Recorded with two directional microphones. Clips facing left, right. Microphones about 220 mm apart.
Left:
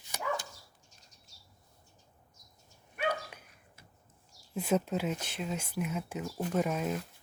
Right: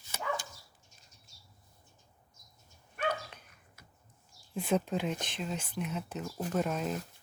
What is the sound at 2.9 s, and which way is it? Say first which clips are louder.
Dog: left 1 dB; 10° left (ahead or behind).